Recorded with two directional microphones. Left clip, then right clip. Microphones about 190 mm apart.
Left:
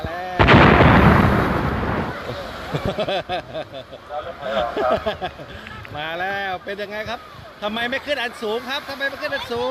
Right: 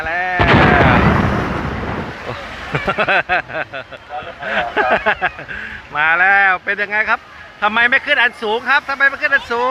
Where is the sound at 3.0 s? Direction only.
20° right (ahead or behind).